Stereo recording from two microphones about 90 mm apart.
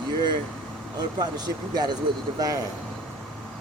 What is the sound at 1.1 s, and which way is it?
Speech, 50° right (ahead or behind).